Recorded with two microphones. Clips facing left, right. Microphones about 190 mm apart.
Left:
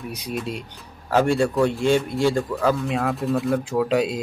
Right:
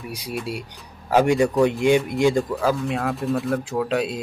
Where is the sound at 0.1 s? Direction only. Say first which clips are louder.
Right 1 dB; 10° right (ahead or behind).